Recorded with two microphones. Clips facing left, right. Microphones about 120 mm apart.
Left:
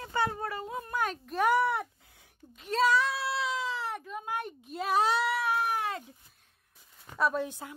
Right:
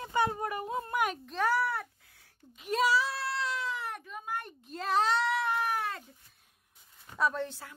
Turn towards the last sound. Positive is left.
turn(degrees=15)  # may be behind; listen again after turning